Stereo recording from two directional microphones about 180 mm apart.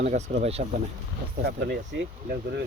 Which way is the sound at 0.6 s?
60° right (ahead or behind).